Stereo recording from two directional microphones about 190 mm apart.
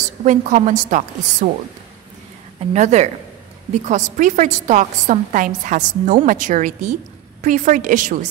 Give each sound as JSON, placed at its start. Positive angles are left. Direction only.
{"t": 0.2, "sound": "a woman's voice", "side_deg": -40}
{"t": 2.6, "sound": "a woman's voice", "side_deg": -35}